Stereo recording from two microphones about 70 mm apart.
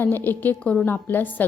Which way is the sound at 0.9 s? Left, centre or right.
Left.